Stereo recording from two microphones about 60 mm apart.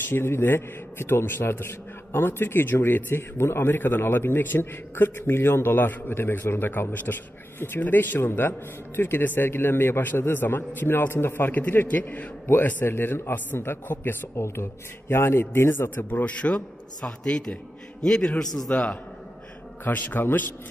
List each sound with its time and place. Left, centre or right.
0.1 s a man's voice: left
17.2 s a man's voice: centre
18.7 s a man's voice: centre
19.8 s a man's voice: left